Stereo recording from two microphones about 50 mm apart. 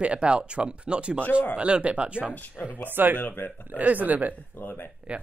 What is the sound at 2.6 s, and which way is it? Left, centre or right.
Speech, left.